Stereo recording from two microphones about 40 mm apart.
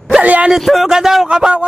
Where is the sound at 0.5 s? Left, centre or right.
Centre.